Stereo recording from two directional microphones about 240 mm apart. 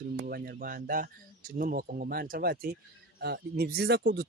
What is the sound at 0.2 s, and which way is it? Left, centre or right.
Speech, right.